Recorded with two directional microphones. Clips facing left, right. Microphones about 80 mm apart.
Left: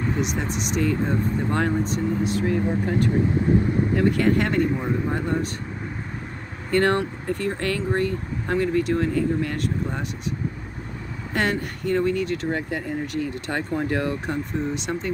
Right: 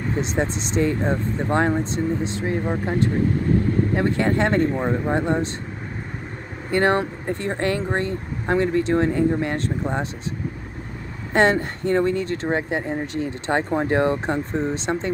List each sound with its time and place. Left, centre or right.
0.2 s speech: right
6.7 s speech: right
11.3 s speech: right